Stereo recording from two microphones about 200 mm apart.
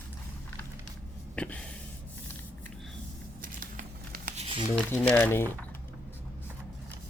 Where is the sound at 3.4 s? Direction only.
45° right (ahead or behind).